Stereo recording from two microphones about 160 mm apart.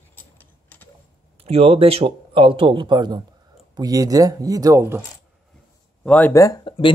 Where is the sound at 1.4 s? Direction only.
40° right (ahead or behind); by 5.0 s 20° right (ahead or behind).